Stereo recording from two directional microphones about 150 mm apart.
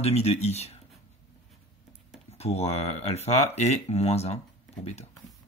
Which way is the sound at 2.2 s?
45° left (ahead or behind).